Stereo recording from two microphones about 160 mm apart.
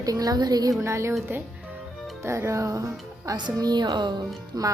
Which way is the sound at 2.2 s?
15° right (ahead or behind).